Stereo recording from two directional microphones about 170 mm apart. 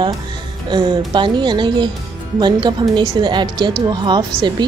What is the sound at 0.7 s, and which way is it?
A woman's voice, 25° right (ahead or behind).